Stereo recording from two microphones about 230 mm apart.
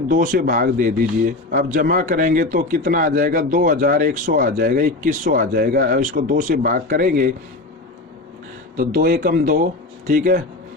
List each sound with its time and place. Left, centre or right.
0.1 s a man's voice: right
8.7 s a man's voice: right